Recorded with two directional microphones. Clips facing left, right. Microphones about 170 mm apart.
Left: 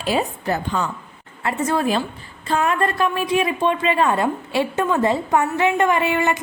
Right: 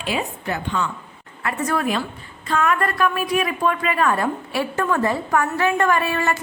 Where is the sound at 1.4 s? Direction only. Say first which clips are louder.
Left 2 dB; 25° left (ahead or behind).